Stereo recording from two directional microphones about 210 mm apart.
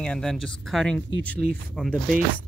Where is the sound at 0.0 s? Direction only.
5° left (ahead or behind).